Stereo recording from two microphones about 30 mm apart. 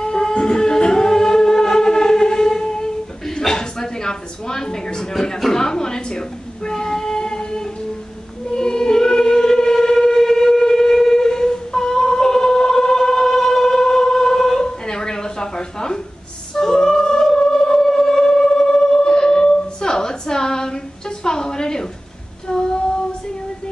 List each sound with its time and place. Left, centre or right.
0.0 s music: left
5.5 s a sound: left
8.5 s choir: left
16.5 s music: centre
18.9 s a sound: left
22.5 s female singing: left